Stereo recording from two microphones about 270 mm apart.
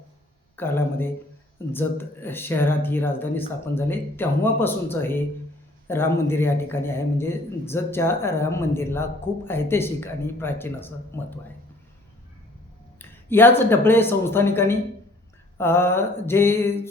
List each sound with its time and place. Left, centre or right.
0.5 s speech: centre
13.0 s speech: centre